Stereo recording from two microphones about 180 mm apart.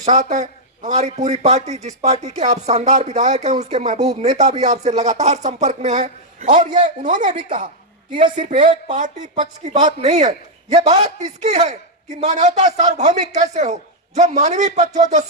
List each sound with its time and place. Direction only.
0.0 s speech: 40° right (ahead or behind)
8.4 s speech: 45° right (ahead or behind)